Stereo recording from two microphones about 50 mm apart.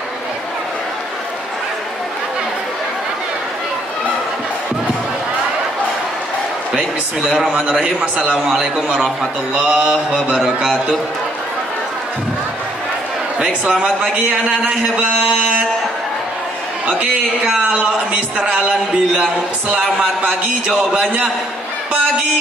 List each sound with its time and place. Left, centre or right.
8.0 s speech: right
8.5 s a man's voice: centre
10.4 s speech: centre
13.4 s a man's voice: centre
18.4 s a man's voice: centre